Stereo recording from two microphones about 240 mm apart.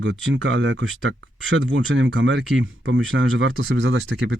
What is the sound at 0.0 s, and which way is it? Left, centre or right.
Speech, right.